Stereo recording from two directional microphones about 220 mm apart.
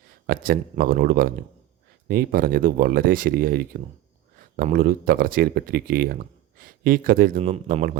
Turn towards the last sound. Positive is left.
turn(degrees=-40)  # may be behind; listen again after turning